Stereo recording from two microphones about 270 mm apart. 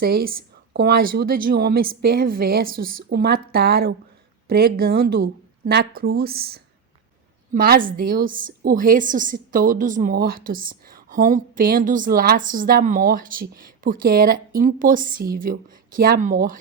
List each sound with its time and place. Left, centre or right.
0.0 s a woman's voice: right